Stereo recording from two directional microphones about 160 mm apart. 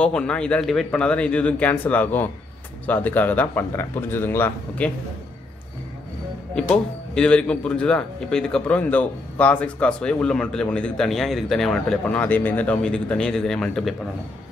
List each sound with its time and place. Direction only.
0.0 s a man's voice: 5° left (ahead or behind)
6.5 s speech: 5° left (ahead or behind)